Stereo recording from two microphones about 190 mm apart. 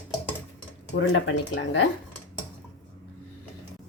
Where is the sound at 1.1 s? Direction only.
75° left (ahead or behind).